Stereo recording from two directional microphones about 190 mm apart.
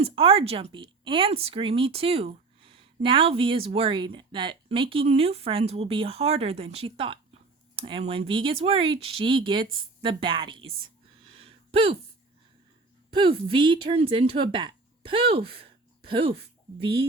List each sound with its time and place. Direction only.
0.0 s speech: 30° right (ahead or behind)
11.3 s a sound: 30° right (ahead or behind)
13.1 s speech: 30° right (ahead or behind)